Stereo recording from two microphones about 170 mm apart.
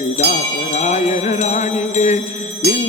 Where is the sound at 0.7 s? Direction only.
40° left (ahead or behind).